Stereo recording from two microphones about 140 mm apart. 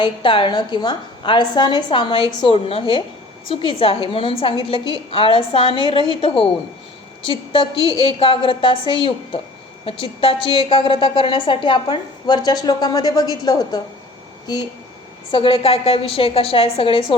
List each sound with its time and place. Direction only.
0.0 s a woman's voice: 35° left (ahead or behind)
15.3 s a woman's voice: 40° left (ahead or behind)